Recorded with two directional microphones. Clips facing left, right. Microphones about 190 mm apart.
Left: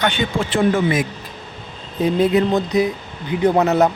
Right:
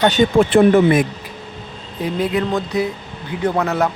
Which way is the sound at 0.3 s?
60° right (ahead or behind).